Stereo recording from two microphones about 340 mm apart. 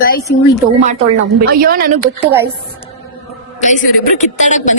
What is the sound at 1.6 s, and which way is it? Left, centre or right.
Speech, right.